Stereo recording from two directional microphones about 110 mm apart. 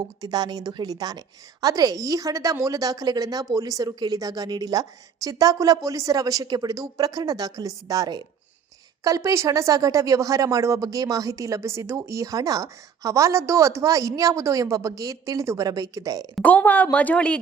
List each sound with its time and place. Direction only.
0.0 s a woman's voice: 40° right (ahead or behind)
16.4 s speech: 15° left (ahead or behind)